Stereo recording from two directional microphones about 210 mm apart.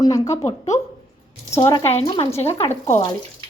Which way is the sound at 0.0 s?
15° left (ahead or behind).